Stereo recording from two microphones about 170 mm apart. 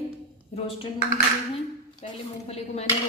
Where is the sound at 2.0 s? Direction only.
35° left (ahead or behind).